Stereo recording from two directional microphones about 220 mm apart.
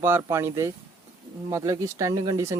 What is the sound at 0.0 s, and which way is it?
Speech, 10° right (ahead or behind).